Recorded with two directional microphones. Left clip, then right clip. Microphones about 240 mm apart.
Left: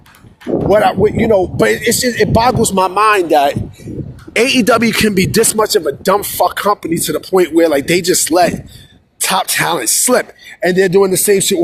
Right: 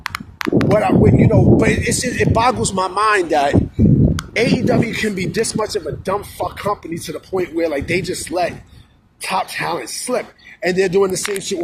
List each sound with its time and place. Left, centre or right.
0.7 s speech: left
4.4 s speech: left